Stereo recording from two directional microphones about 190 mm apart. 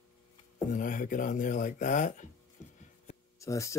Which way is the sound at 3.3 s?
15° left (ahead or behind).